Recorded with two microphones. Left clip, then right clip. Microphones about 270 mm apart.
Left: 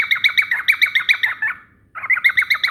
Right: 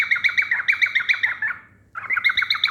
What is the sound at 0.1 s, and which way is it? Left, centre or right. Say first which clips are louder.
Bird: left 3 dB; left.